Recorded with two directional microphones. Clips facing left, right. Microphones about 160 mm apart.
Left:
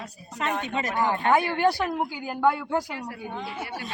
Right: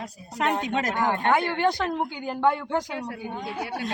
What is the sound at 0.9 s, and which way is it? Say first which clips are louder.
Speech: left 2 dB; 10° left (ahead or behind).